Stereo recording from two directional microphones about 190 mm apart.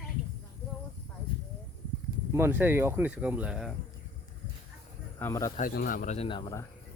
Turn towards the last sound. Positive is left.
turn(degrees=25)  # may be behind; listen again after turning